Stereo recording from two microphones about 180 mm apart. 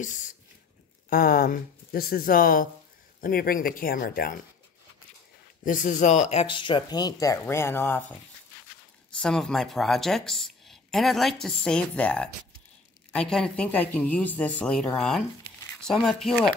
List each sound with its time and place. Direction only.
1.1 s speech: 55° left (ahead or behind)
5.7 s speech: 45° left (ahead or behind); by 16.5 s centre (ahead or behind)